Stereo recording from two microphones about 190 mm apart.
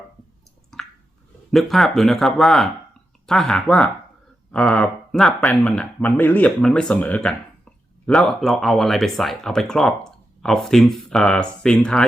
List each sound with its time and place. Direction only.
1.5 s speech: centre (ahead or behind)